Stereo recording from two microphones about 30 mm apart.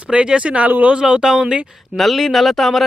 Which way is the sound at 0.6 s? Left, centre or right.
Right.